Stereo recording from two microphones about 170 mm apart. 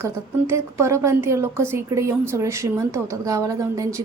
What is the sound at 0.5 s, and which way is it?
A woman's voice, 15° right (ahead or behind).